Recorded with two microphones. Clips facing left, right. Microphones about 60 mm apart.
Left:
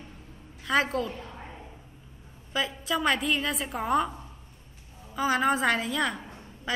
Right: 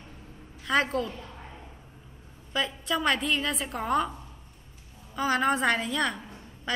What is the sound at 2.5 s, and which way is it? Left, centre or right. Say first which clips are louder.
A woman's voice: even; centre.